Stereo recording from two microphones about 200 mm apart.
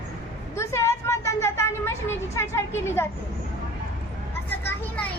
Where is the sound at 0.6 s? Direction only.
15° left (ahead or behind).